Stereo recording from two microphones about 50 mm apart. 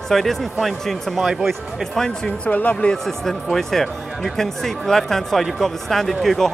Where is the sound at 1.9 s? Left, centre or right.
Centre.